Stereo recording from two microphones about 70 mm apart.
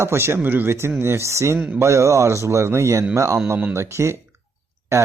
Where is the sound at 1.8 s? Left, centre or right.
Right.